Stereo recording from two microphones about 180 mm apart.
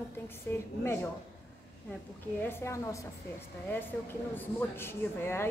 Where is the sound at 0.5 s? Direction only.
15° left (ahead or behind).